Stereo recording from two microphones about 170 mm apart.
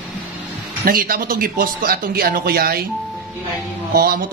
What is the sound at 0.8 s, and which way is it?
Speech, 60° right (ahead or behind).